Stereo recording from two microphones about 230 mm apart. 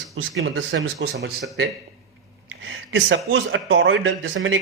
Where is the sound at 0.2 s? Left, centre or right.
Right.